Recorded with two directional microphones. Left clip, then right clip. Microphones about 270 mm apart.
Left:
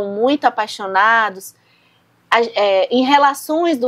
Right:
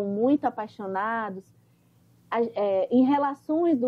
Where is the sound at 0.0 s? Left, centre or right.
Centre.